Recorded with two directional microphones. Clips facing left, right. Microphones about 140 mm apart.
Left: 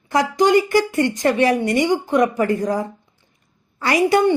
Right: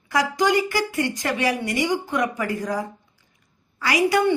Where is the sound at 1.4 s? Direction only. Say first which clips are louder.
Left 4 dB; 45° left (ahead or behind).